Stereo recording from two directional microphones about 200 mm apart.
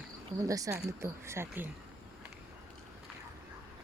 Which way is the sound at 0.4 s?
15° right (ahead or behind).